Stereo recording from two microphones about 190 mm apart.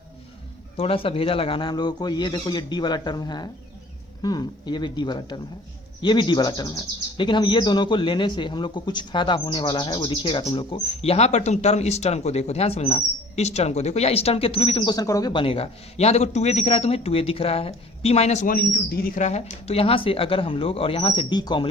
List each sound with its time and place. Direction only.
0.8 s speech: 30° left (ahead or behind)